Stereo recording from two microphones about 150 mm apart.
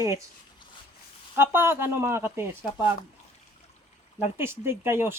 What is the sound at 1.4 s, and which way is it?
Speech, 15° right (ahead or behind).